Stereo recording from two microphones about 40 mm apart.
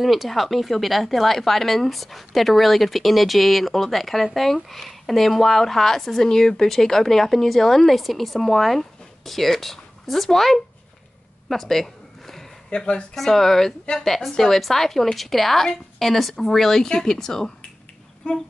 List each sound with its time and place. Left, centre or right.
0.0 s a woman's voice: centre
11.4 s a sound: centre
12.6 s speech: left
13.1 s a woman's voice: centre
18.3 s humming: left